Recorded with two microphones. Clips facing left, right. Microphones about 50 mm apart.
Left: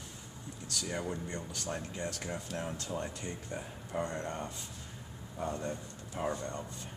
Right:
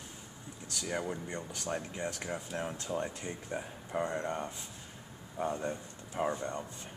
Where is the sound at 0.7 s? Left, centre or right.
Centre.